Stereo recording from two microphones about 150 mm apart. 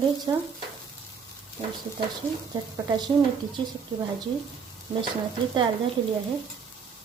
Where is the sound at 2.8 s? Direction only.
30° right (ahead or behind).